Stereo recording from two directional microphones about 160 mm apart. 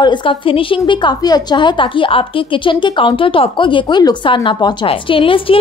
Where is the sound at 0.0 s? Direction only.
30° left (ahead or behind).